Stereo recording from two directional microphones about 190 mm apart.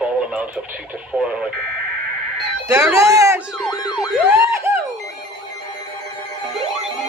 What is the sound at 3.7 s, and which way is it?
Siren, 20° left (ahead or behind).